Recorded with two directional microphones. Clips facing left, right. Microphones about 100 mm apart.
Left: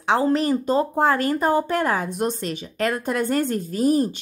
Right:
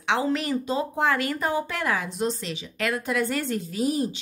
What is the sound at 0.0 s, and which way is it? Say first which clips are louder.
A woman's voice: left 5 dB; 40° left (ahead or behind).